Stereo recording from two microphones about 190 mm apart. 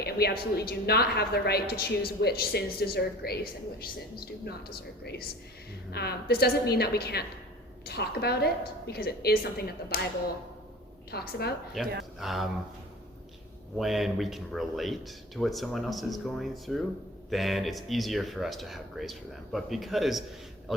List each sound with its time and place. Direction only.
0.0 s a woman's voice: 55° left (ahead or behind)
11.1 s a woman's voice: 55° left (ahead or behind)
11.7 s speech: centre (ahead or behind)
13.7 s speech: centre (ahead or behind)